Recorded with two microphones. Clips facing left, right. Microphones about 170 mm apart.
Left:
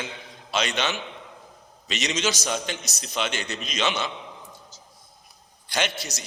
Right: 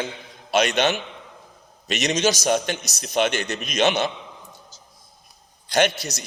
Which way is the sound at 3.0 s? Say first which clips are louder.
Right 8 dB; 55° right (ahead or behind).